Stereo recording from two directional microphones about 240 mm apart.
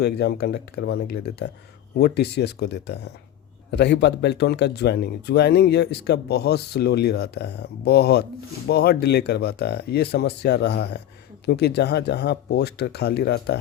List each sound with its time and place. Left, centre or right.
0.0 s speech: left